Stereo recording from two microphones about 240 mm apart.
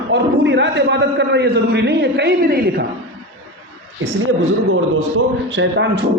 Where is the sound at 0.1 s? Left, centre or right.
Right.